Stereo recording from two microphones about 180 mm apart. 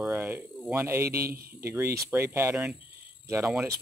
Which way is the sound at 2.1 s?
15° right (ahead or behind).